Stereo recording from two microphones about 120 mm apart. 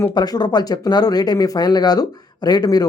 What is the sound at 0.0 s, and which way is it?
Speech, 35° left (ahead or behind).